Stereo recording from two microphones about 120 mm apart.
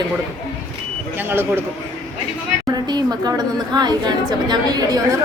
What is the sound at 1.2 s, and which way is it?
Speech, 20° right (ahead or behind).